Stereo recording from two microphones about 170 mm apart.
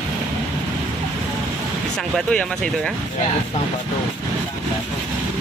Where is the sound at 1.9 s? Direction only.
5° left (ahead or behind).